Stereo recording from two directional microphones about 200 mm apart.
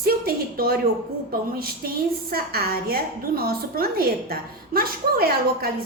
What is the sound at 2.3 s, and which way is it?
A woman's voice, 50° right (ahead or behind).